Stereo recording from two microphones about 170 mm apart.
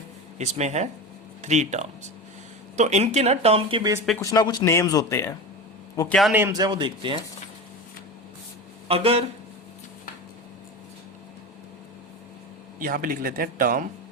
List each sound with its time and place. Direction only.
0.3 s speech: 40° right (ahead or behind)
4.2 s speech: 20° left (ahead or behind)
6.1 s a man's voice: 5° left (ahead or behind)
6.3 s a man's voice: 15° right (ahead or behind)
8.9 s speech: 35° right (ahead or behind)
12.8 s speech: 55° right (ahead or behind)